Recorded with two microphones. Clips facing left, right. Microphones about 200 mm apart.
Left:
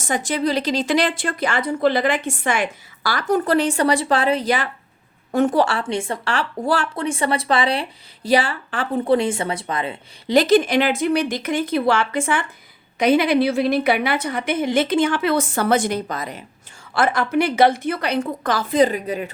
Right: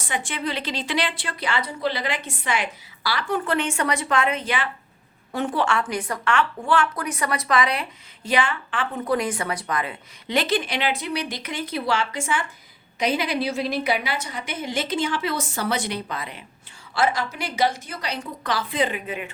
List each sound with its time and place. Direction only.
0.0 s a woman's voice: 40° left (ahead or behind)
5.9 s speech: 25° left (ahead or behind)
10.3 s a woman's voice: 40° left (ahead or behind)
16.9 s a woman's voice: 55° left (ahead or behind); by 19.3 s 40° left (ahead or behind)